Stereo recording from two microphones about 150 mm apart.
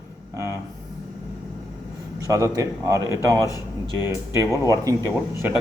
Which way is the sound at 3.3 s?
20° left (ahead or behind).